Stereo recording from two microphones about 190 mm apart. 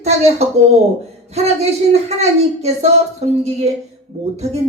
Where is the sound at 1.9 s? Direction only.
35° right (ahead or behind).